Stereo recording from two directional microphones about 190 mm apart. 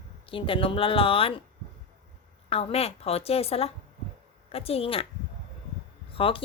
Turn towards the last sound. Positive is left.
turn(degrees=30)  # may be behind; listen again after turning